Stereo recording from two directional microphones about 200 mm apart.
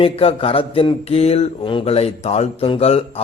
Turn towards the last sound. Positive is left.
turn(degrees=30)  # may be behind; listen again after turning